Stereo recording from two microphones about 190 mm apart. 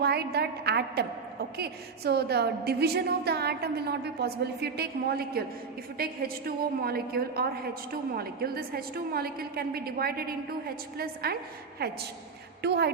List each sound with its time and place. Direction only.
0.0 s a woman's voice: 60° right (ahead or behind)